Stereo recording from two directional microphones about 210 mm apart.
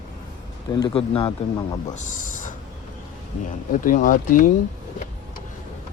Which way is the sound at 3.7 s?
40° left (ahead or behind).